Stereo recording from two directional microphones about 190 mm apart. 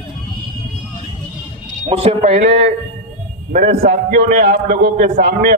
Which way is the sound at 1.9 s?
30° right (ahead or behind).